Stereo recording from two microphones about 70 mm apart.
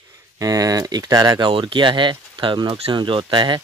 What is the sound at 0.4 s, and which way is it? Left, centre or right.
Speech, right.